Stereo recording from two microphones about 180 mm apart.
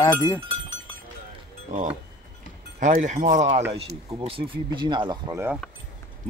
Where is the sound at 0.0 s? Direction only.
15° left (ahead or behind).